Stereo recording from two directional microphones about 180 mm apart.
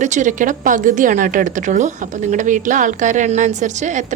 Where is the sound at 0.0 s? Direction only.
40° right (ahead or behind).